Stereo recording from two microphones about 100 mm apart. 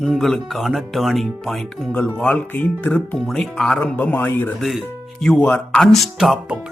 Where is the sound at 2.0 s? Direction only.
15° left (ahead or behind).